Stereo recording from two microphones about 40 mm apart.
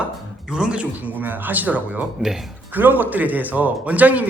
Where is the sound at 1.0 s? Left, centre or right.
Right.